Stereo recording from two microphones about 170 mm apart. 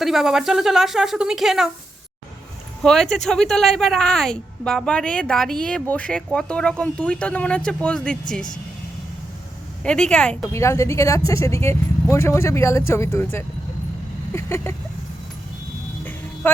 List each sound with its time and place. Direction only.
0.0 s a woman's voice: centre (ahead or behind)
2.8 s a woman's voice: 5° left (ahead or behind)
9.8 s a woman's voice: 5° left (ahead or behind)
10.5 s speech: 15° left (ahead or behind)
14.3 s a sound: 15° left (ahead or behind)